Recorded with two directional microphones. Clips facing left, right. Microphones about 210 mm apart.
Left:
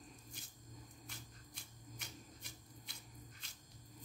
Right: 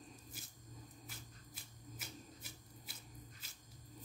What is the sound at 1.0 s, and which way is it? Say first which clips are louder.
Shuffling cards: even; 5° right (ahead or behind).